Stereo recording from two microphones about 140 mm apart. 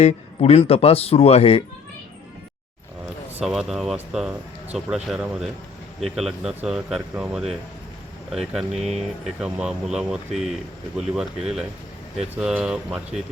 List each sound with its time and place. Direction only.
0.0 s speech: 45° left (ahead or behind)
3.4 s speech: 5° right (ahead or behind)
8.8 s speech: 50° right (ahead or behind)
9.4 s speech: 5° right (ahead or behind)